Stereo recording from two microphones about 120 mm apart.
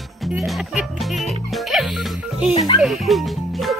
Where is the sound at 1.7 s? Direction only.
5° right (ahead or behind).